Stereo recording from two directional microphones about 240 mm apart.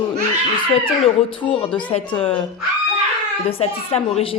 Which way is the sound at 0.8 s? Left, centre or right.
Left.